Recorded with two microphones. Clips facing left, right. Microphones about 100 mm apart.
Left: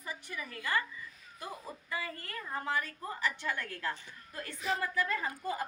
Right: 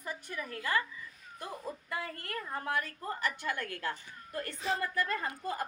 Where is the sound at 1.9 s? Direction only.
60° right (ahead or behind).